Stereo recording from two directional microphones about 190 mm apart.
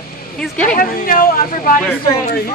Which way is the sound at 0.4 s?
5° left (ahead or behind).